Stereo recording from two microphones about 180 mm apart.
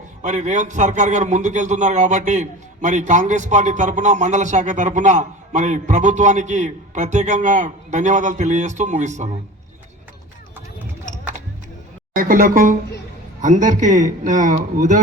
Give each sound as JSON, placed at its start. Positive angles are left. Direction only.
{"t": 0.2, "sound": "a man's voice", "side_deg": -40}
{"t": 12.1, "sound": "a man's voice", "side_deg": -50}